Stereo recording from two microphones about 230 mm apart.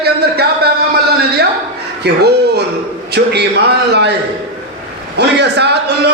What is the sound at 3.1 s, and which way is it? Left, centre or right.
A man's voice, right.